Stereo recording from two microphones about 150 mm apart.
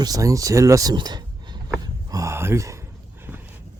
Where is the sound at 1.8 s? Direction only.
25° right (ahead or behind).